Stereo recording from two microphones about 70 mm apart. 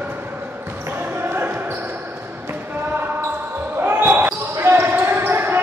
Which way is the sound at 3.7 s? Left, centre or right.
Right.